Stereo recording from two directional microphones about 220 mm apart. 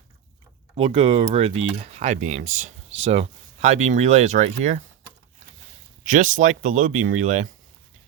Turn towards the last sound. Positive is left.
turn(degrees=-35)  # may be behind; listen again after turning